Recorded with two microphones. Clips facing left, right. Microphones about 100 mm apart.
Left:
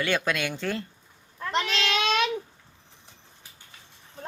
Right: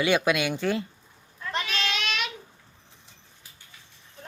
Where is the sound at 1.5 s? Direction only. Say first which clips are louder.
Left 4 dB; 35° left (ahead or behind).